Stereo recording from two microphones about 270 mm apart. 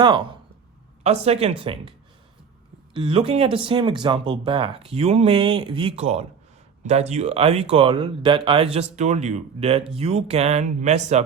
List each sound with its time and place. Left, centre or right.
0.0 s speech: centre
2.9 s speech: centre